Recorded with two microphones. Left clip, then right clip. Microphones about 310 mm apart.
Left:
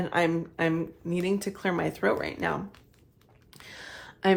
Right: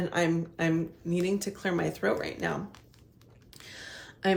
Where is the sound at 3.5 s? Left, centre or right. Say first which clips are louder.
Left 1 dB; centre.